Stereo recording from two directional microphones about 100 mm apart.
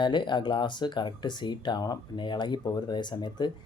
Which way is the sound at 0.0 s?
50° left (ahead or behind).